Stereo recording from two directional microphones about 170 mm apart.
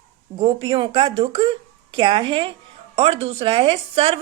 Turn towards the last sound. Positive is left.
turn(degrees=-30)  # may be behind; listen again after turning